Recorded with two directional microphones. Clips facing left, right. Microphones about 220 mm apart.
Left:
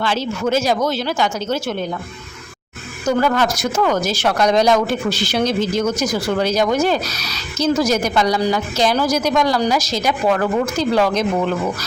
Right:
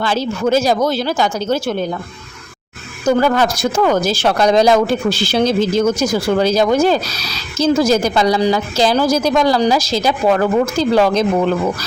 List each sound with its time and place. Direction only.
0.0 s a woman's voice: 40° right (ahead or behind)
3.1 s a woman's voice: 30° right (ahead or behind)